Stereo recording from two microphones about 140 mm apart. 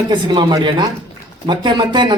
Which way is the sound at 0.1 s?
30° right (ahead or behind).